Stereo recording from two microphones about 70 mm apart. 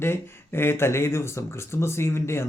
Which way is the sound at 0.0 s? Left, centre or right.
Left.